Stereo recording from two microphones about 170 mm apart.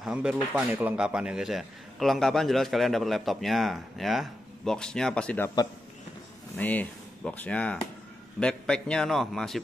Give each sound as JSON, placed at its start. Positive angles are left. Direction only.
{"t": 0.0, "sound": "speech", "side_deg": -5}
{"t": 6.5, "sound": "speech", "side_deg": 10}